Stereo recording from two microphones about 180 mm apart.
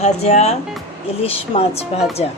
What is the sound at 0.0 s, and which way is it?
Speech, 40° left (ahead or behind).